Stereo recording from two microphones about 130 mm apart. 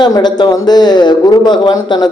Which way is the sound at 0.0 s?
35° left (ahead or behind).